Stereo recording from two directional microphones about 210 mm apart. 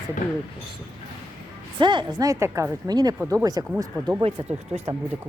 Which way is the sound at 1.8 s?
20° right (ahead or behind).